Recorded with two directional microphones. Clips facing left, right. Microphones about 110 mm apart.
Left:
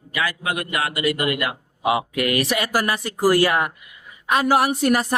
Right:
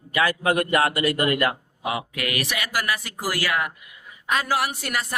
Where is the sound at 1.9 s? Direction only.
30° left (ahead or behind).